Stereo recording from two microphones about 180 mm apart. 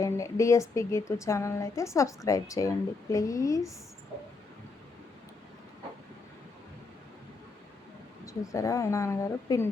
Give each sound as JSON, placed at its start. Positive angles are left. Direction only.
{"t": 0.0, "sound": "speech", "side_deg": 15}
{"t": 8.2, "sound": "speech", "side_deg": 15}